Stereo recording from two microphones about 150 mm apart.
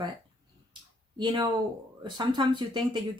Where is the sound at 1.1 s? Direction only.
30° right (ahead or behind).